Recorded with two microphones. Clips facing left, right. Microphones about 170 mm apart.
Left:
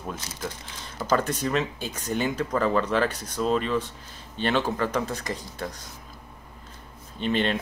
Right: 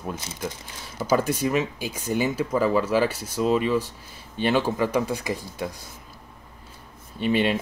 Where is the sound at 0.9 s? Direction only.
10° right (ahead or behind).